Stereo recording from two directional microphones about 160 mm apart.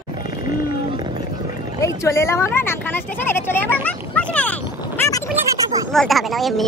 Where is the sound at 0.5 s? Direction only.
25° right (ahead or behind).